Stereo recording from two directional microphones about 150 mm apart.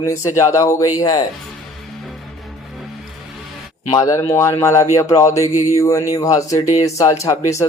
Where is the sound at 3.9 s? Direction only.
20° left (ahead or behind).